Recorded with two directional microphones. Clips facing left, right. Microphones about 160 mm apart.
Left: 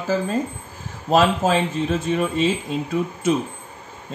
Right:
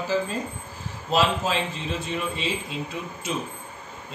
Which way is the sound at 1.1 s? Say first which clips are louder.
Left 6 dB; 50° left (ahead or behind).